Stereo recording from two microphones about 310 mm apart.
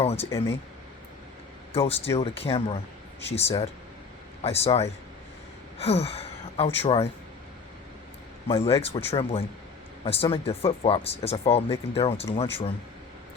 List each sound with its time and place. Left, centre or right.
0.0 s speech: centre
0.3 s speech: centre
1.7 s speech: centre
8.4 s speech: centre